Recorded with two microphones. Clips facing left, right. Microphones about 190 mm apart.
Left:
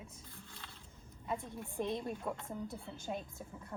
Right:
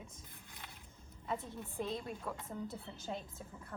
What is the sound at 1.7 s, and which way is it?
A woman's voice, 20° left (ahead or behind).